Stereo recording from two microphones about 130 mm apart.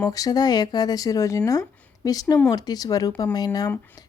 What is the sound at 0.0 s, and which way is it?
Speech, 30° left (ahead or behind).